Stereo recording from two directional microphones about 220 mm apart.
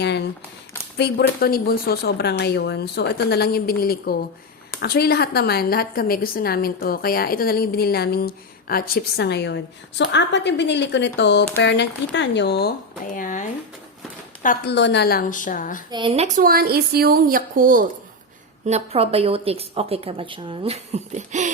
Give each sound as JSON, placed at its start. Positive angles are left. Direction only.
{"t": 0.9, "sound": "a woman's voice", "side_deg": 45}
{"t": 13.1, "sound": "a woman's voice", "side_deg": 35}
{"t": 15.9, "sound": "speech", "side_deg": -20}